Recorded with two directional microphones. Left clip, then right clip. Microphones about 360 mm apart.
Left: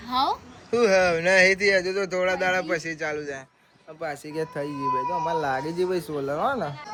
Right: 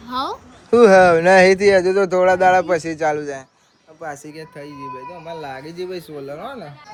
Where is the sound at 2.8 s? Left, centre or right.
Right.